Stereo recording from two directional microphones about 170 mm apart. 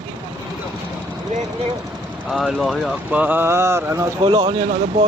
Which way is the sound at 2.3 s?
Centre (ahead or behind).